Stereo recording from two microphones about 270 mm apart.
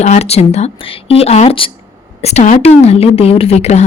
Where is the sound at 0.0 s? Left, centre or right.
Left.